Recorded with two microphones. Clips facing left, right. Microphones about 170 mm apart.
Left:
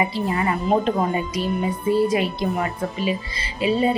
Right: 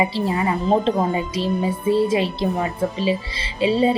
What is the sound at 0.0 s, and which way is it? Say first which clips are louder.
A woman's voice: right 2 dB; 25° right (ahead or behind).